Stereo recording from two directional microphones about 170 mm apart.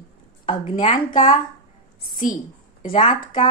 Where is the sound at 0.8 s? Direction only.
50° left (ahead or behind).